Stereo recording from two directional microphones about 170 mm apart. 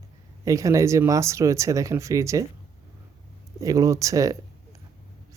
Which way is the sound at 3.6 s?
20° right (ahead or behind).